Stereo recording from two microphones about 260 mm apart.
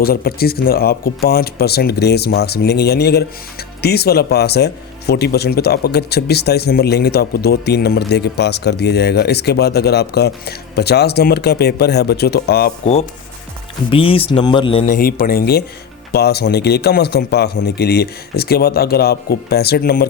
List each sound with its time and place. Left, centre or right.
0.0 s speech: left
12.8 s speech: left